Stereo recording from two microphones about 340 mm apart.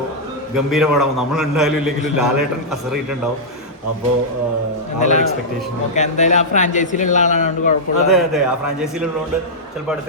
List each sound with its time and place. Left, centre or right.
0.5 s a man's voice: centre
4.9 s a man's voice: left
8.1 s a man's voice: centre